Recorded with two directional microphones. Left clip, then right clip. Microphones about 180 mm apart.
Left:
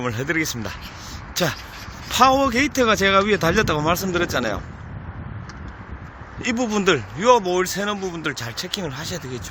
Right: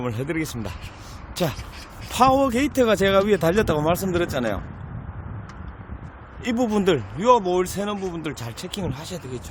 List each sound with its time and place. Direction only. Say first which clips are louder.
0.0 s speech: left 4 dB; centre (ahead or behind)
6.4 s speech: left 1 dB; 25° right (ahead or behind); by 9.4 s centre (ahead or behind)